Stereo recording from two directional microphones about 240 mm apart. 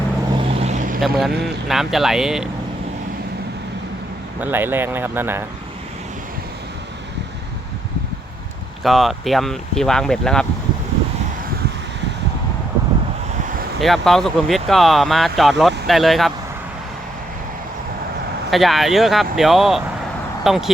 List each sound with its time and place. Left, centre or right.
0.3 s vehicle: right
1.0 s speech: centre
4.4 s speech: centre
8.8 s speech: centre
13.8 s speech: centre
18.5 s speech: centre